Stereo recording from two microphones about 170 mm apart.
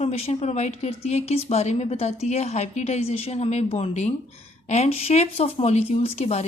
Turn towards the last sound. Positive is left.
turn(degrees=35)  # may be behind; listen again after turning